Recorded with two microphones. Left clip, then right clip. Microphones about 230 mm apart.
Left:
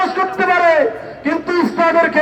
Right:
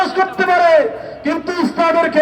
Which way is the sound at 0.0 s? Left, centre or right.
Right.